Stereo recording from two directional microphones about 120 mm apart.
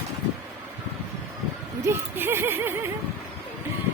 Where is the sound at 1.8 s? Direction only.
20° right (ahead or behind).